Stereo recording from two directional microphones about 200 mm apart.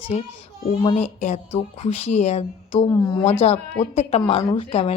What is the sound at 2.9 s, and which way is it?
Speech, 15° left (ahead or behind).